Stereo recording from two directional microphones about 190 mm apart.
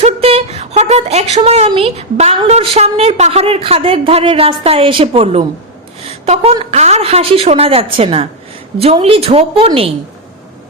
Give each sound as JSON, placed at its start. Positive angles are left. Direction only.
{"t": 0.0, "sound": "speech", "side_deg": -30}